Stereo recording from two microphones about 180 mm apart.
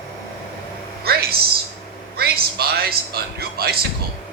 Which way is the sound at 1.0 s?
60° right (ahead or behind).